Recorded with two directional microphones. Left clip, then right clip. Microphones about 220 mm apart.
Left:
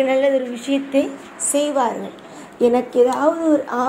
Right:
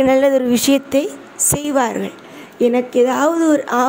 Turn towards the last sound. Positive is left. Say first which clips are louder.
# right 4 dB
turn(degrees=-40)  # may be behind; listen again after turning